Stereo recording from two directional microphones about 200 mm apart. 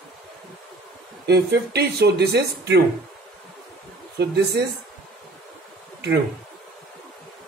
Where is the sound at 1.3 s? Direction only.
55° right (ahead or behind).